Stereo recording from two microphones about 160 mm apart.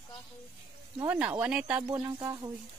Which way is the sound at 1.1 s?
10° right (ahead or behind).